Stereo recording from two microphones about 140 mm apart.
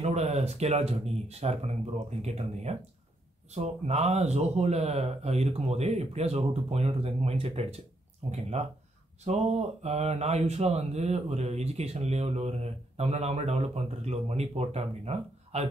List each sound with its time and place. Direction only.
0.0 s speech: 50° right (ahead or behind)